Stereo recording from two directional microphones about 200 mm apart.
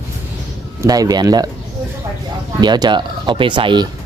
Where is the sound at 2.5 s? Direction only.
20° right (ahead or behind).